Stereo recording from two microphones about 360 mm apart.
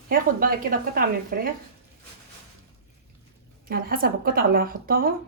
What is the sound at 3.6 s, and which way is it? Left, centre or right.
A woman's voice, right.